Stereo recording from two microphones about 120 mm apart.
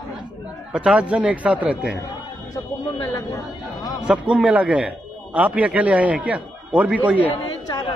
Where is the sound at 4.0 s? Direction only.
5° right (ahead or behind).